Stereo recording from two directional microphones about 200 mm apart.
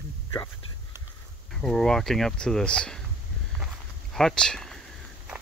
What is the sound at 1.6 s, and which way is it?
Speech, 5° left (ahead or behind).